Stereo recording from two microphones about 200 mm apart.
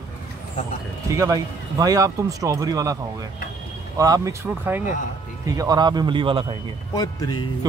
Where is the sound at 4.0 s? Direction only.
15° right (ahead or behind).